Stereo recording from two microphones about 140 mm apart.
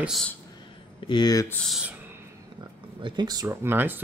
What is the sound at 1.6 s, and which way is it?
Speech, centre (ahead or behind).